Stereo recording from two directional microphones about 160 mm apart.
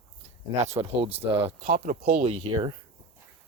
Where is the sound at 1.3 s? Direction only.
20° right (ahead or behind).